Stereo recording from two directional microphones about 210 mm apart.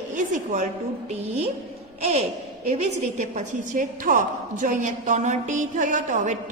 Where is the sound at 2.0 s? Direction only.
30° right (ahead or behind).